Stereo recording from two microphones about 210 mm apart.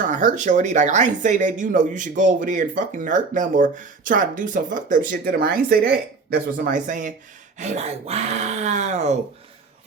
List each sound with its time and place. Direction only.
0.0 s speech: 40° right (ahead or behind)